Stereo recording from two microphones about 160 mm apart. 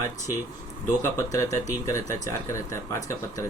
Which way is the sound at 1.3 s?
20° left (ahead or behind).